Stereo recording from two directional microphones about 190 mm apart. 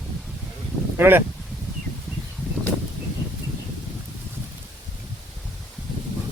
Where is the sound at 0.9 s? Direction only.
10° right (ahead or behind).